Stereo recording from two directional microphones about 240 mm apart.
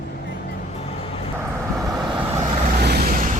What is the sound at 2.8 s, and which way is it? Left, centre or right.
Vehicle, right.